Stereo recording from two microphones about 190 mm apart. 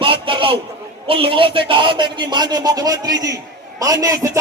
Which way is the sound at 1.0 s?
30° right (ahead or behind).